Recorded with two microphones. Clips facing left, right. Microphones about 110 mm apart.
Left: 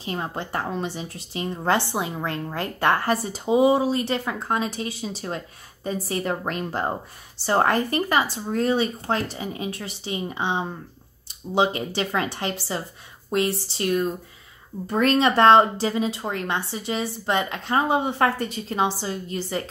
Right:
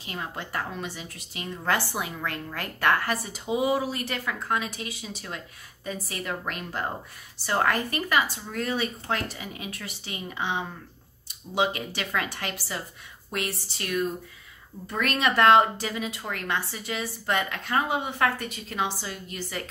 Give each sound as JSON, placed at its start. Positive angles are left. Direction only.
{"t": 0.0, "sound": "a woman's voice", "side_deg": 30}